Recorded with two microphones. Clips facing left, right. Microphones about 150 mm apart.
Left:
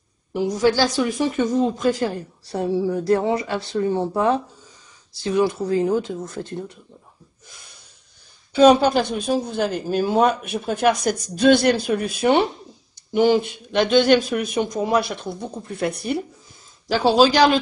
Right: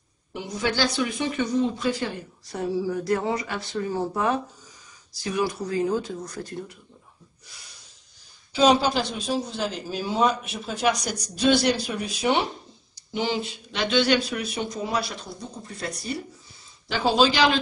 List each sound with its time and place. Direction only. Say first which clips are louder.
0.3 s speech: left 9 dB; 40° left (ahead or behind)
2.5 s speech: left 5 dB; 25° left (ahead or behind)
8.5 s a woman's voice: left 6 dB; 50° left (ahead or behind)
17.1 s speech: left 5 dB; 40° left (ahead or behind)